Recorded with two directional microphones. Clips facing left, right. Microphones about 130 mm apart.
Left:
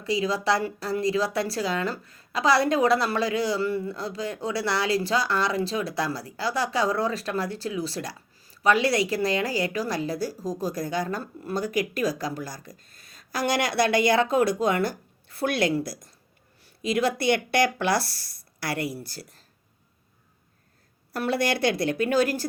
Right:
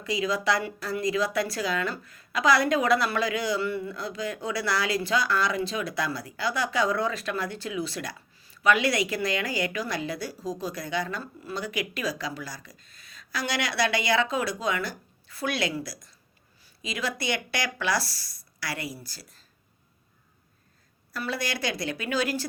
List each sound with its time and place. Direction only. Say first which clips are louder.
0.0 s a woman's voice: left 2 dB; 30° left (ahead or behind); by 19.4 s 60° left (ahead or behind)
21.1 s speech: left 6 dB; 60° left (ahead or behind)